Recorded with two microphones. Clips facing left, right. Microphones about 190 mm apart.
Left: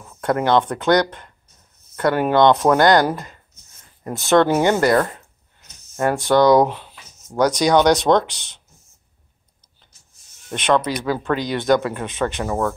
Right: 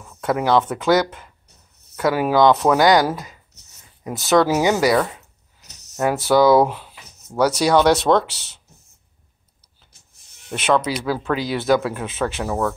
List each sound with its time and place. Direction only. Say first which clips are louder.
0.0 s speech: left 1 dB; centre (ahead or behind)
5.6 s a sound: right 1 dB; 70° right (ahead or behind)
5.9 s speech: even; 5° right (ahead or behind)
10.5 s speech: even; 5° right (ahead or behind)